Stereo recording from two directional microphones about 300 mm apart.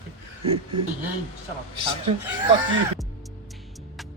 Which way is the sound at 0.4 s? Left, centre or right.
Centre.